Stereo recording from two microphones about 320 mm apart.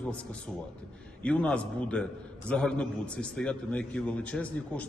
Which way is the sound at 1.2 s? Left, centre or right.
Centre.